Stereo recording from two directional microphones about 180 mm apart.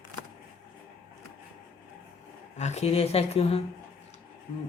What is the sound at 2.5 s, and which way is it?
Speech, 40° left (ahead or behind).